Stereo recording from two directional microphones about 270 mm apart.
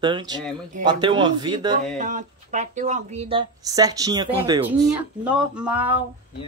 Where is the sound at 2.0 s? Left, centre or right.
Right.